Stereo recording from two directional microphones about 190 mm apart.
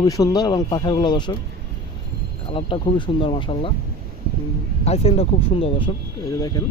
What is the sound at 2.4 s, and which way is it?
Speech, 25° left (ahead or behind).